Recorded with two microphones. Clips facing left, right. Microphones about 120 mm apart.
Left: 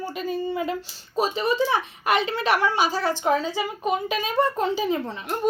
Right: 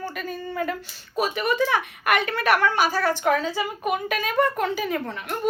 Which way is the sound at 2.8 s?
25° left (ahead or behind).